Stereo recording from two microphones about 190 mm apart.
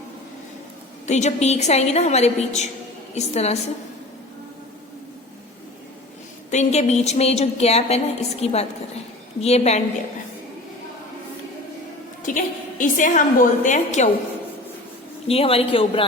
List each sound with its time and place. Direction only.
1.0 s a woman's voice: 35° left (ahead or behind)
6.5 s a woman's voice: 35° left (ahead or behind)
12.2 s a woman's voice: 45° left (ahead or behind)
15.3 s speech: 30° left (ahead or behind)